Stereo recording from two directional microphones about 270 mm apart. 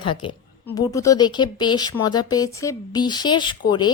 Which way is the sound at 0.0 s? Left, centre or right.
Centre.